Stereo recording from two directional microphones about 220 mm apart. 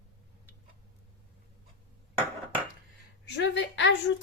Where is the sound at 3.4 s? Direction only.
55° left (ahead or behind).